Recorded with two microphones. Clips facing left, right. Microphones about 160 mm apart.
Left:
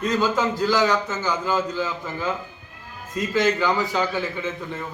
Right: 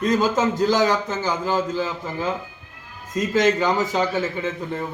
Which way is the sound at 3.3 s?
20° right (ahead or behind).